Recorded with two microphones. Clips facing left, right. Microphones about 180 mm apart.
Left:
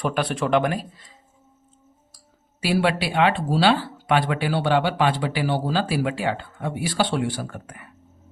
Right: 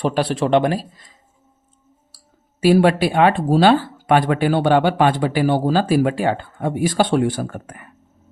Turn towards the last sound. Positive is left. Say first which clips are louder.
# right 6 dB
turn(degrees=-50)  # may be behind; listen again after turning